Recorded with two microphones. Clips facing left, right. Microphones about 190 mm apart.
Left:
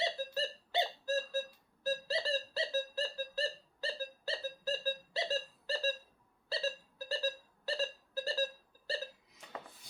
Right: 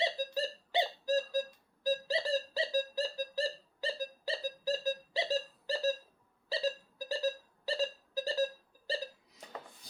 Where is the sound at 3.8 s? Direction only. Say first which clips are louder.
Right 3 dB; 15° right (ahead or behind).